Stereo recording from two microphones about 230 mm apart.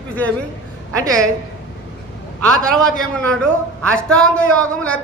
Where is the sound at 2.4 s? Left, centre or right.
Centre.